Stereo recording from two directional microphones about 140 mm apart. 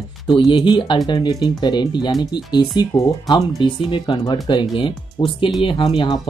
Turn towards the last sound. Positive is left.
turn(degrees=40)  # may be behind; listen again after turning